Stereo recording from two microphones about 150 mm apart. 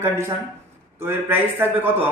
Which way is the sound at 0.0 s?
15° right (ahead or behind).